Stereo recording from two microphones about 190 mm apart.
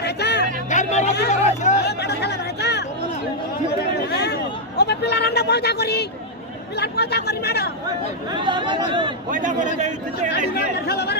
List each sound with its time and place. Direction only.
0.0 s a sound: 60° left (ahead or behind)
0.7 s speech: 40° left (ahead or behind)
1.3 s a sound: 40° left (ahead or behind)
1.9 s chatter: 60° left (ahead or behind)
4.1 s a sound: 60° left (ahead or behind)
6.8 s speech: 60° left (ahead or behind)
8.4 s speech: 25° right (ahead or behind)
9.3 s a man's voice: 40° right (ahead or behind)
10.9 s speech: 60° left (ahead or behind)